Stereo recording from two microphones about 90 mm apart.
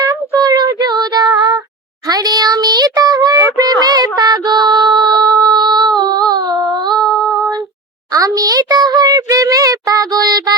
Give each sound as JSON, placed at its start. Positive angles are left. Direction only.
{"t": 0.3, "sound": "child singing", "side_deg": -50}
{"t": 6.0, "sound": "humming", "side_deg": -50}
{"t": 6.9, "sound": "female singing", "side_deg": 0}
{"t": 8.1, "sound": "a sound", "side_deg": -40}